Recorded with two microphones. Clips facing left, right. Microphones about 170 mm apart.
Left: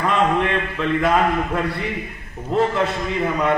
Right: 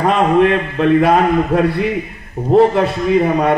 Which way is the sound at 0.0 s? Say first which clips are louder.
Right 7 dB; 60° right (ahead or behind).